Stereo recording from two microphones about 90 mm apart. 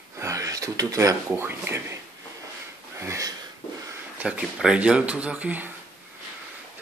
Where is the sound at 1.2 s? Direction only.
25° right (ahead or behind).